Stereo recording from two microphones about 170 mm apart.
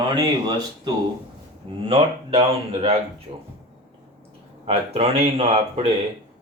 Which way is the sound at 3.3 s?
35° right (ahead or behind).